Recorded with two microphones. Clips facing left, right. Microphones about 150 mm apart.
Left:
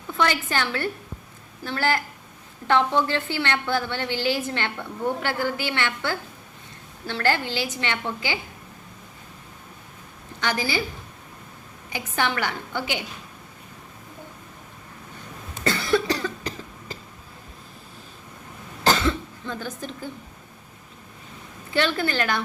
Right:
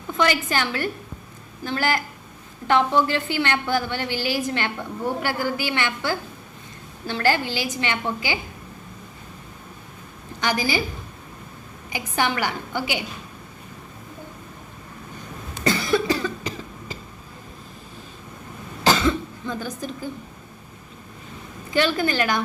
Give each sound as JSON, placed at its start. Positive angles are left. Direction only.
{"t": 0.2, "sound": "a woman's voice", "side_deg": -15}
{"t": 10.4, "sound": "a woman's voice", "side_deg": -10}
{"t": 11.9, "sound": "a woman's voice", "side_deg": -10}
{"t": 15.6, "sound": "cough", "side_deg": -15}
{"t": 18.9, "sound": "cough", "side_deg": -10}
{"t": 21.7, "sound": "a woman's voice", "side_deg": -15}